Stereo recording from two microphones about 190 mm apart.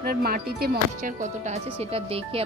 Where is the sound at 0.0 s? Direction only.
55° right (ahead or behind).